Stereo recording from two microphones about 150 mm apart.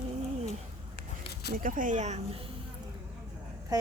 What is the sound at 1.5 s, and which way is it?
Speech, 65° right (ahead or behind).